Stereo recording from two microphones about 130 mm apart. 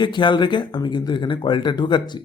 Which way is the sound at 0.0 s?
35° left (ahead or behind).